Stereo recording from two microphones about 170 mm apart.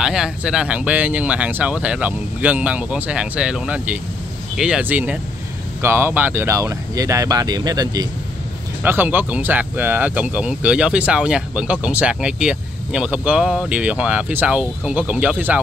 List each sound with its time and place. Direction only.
0.0 s speech: 5° right (ahead or behind); by 8.1 s 20° right (ahead or behind)
8.8 s speech: 10° right (ahead or behind)